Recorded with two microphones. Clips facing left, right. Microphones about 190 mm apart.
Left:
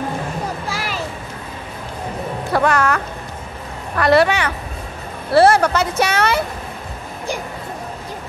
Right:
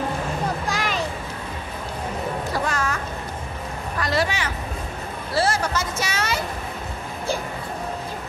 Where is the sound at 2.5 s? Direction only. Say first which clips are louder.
Left 13 dB; 65° left (ahead or behind).